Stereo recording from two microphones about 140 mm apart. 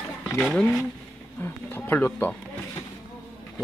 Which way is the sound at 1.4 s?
15° left (ahead or behind).